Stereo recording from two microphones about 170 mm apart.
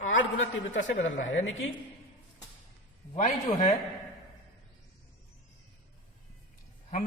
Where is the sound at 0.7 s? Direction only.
90° left.